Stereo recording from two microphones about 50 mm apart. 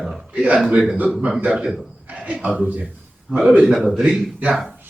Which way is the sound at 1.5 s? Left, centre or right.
Centre.